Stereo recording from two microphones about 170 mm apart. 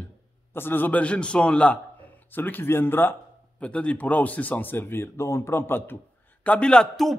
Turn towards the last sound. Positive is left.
turn(degrees=5)  # may be behind; listen again after turning